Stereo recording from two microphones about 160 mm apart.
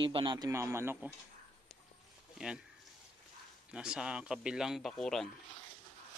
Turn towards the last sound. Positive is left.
turn(degrees=5)  # may be behind; listen again after turning